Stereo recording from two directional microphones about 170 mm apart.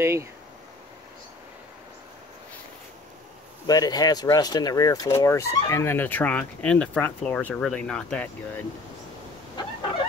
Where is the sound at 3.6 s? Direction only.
20° left (ahead or behind); by 8.7 s 5° left (ahead or behind).